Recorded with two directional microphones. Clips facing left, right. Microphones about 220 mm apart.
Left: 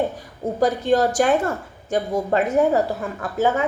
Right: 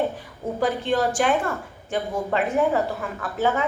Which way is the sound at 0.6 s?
40° left (ahead or behind).